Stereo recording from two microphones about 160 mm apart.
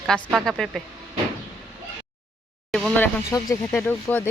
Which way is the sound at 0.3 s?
Centre (ahead or behind).